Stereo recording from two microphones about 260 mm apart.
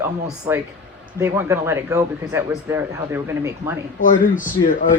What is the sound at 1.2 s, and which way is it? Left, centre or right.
Speech, centre.